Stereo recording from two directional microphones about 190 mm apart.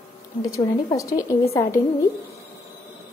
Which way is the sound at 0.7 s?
20° left (ahead or behind).